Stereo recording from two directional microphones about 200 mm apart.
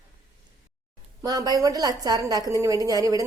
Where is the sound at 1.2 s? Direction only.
20° right (ahead or behind).